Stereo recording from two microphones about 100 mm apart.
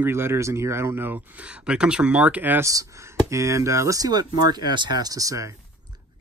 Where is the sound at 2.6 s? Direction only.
35° right (ahead or behind).